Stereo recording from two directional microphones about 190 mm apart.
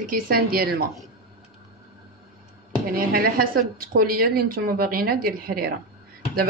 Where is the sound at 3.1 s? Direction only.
50° right (ahead or behind).